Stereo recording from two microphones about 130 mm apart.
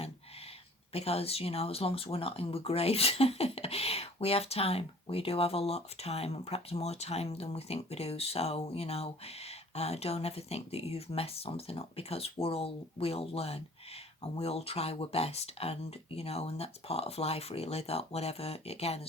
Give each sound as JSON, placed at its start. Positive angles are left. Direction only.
{"t": 0.9, "sound": "speech", "side_deg": 50}